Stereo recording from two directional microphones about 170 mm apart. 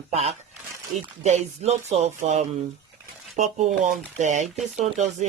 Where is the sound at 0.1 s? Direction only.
40° right (ahead or behind).